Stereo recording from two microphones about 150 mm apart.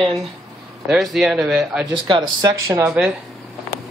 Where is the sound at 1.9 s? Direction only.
30° right (ahead or behind).